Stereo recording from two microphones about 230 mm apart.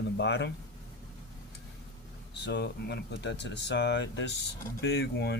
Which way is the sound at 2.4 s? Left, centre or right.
Left.